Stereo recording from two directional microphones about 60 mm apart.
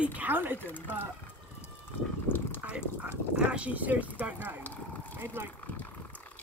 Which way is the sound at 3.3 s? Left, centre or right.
Centre.